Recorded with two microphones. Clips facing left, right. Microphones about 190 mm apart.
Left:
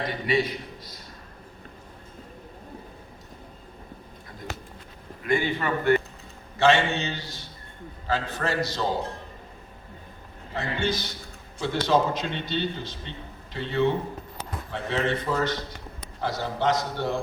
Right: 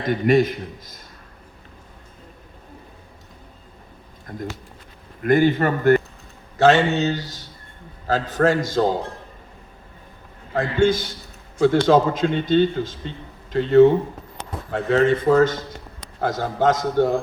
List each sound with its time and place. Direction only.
0.0 s speech: 45° right (ahead or behind)
4.3 s speech: 50° right (ahead or behind)
10.5 s speech: 50° right (ahead or behind)